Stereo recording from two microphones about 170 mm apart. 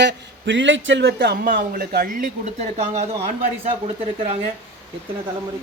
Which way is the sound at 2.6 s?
40° right (ahead or behind).